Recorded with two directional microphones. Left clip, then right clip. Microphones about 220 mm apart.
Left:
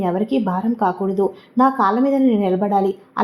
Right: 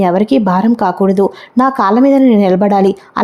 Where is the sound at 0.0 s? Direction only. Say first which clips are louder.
Right 9 dB; 40° right (ahead or behind).